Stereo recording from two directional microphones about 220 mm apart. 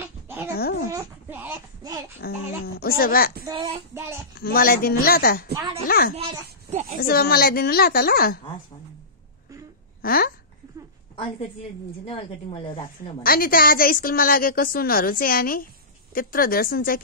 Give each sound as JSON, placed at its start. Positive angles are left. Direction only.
{"t": 0.6, "sound": "babbling", "side_deg": 45}
{"t": 0.9, "sound": "a sound", "side_deg": -10}
{"t": 2.2, "sound": "a woman's voice", "side_deg": 45}
{"t": 3.4, "sound": "child singing", "side_deg": -20}
{"t": 3.9, "sound": "a child's voice", "side_deg": -10}
{"t": 4.4, "sound": "a woman's voice", "side_deg": 40}
{"t": 5.5, "sound": "a child's voice", "side_deg": -15}
{"t": 5.9, "sound": "a woman's voice", "side_deg": 45}
{"t": 6.1, "sound": "a sound", "side_deg": -30}
{"t": 7.0, "sound": "a woman's voice", "side_deg": 45}
{"t": 10.0, "sound": "a woman's voice", "side_deg": 40}
{"t": 12.1, "sound": "a woman's voice", "side_deg": 25}
{"t": 13.2, "sound": "a woman's voice", "side_deg": 40}